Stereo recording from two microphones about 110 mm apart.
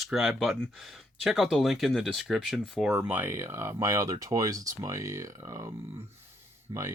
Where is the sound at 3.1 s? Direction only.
20° right (ahead or behind).